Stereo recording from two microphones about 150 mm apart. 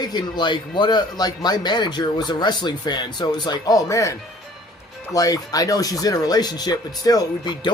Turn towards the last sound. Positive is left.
turn(degrees=30)  # may be behind; listen again after turning